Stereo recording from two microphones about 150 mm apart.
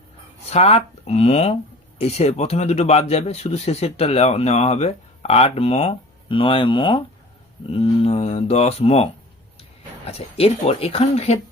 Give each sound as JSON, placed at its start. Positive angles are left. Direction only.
{"t": 0.5, "sound": "speech", "side_deg": 45}
{"t": 10.1, "sound": "speech", "side_deg": 40}